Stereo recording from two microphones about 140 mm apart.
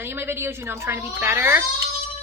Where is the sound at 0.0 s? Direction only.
15° right (ahead or behind).